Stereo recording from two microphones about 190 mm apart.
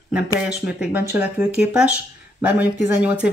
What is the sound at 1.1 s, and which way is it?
Speech, 5° right (ahead or behind).